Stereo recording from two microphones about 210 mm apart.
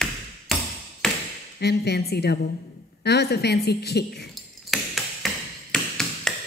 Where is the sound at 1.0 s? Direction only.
Centre (ahead or behind).